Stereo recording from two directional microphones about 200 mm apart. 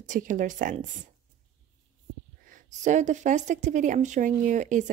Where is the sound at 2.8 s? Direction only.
35° right (ahead or behind).